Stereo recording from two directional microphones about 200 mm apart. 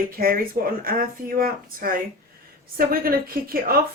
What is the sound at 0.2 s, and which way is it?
Speech, 45° right (ahead or behind).